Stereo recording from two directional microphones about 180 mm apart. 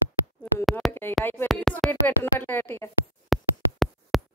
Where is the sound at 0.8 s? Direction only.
Centre (ahead or behind).